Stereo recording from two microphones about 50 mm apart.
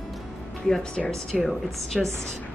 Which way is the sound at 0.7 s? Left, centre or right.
Centre.